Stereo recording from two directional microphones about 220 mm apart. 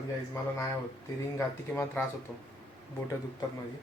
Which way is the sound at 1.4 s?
10° left (ahead or behind).